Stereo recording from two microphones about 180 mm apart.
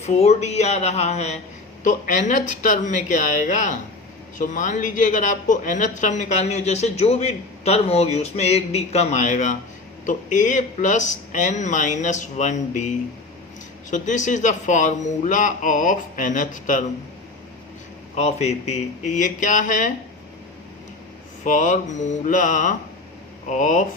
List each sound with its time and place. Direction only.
0.0 s a woman's voice: 35° left (ahead or behind)
13.9 s a man's voice: 45° left (ahead or behind)
18.1 s a man's voice: 40° left (ahead or behind)
21.4 s a man's voice: 45° left (ahead or behind)